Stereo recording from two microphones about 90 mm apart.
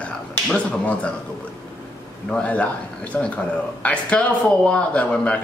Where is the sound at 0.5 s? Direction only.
15° left (ahead or behind).